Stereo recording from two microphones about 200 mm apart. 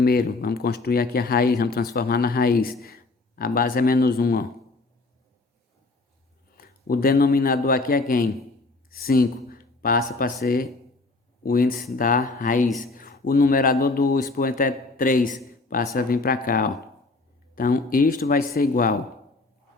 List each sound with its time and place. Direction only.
0.0 s speech: 50° left (ahead or behind)
6.6 s speech: 45° left (ahead or behind)